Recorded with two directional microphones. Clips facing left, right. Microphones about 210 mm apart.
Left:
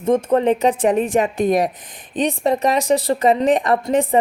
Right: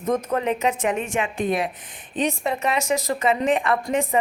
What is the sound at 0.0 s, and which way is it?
A woman's voice, 30° left (ahead or behind).